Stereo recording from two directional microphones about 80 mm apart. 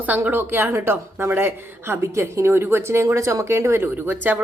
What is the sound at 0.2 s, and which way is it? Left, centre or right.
Speech, right.